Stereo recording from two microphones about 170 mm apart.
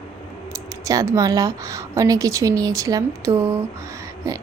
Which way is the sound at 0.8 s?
20° right (ahead or behind).